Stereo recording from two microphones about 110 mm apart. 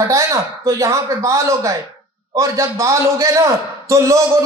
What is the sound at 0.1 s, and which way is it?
A man's voice, 30° right (ahead or behind).